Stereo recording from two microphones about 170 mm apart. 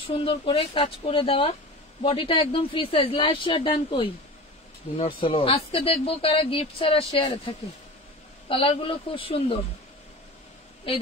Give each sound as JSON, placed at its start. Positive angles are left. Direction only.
{"t": 0.0, "sound": "speech", "side_deg": 30}